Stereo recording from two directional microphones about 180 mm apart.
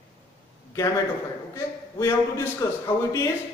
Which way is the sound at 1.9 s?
15° left (ahead or behind).